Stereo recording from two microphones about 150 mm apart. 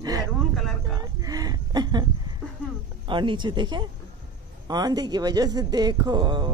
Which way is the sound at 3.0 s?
35° right (ahead or behind).